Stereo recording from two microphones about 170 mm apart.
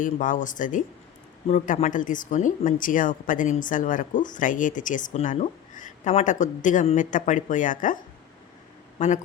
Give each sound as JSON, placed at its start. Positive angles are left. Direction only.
{"t": 0.0, "sound": "a woman's voice", "side_deg": 50}
{"t": 9.0, "sound": "a man's voice", "side_deg": 45}